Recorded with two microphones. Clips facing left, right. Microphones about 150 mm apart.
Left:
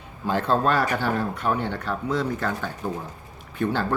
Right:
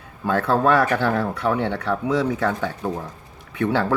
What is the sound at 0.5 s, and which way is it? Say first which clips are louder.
Speech: right 4 dB; 70° right (ahead or behind).